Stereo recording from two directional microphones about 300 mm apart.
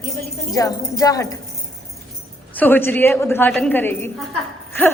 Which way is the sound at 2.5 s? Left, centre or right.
Centre.